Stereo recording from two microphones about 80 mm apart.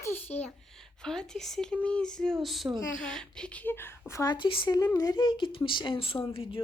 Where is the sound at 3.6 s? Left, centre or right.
Left.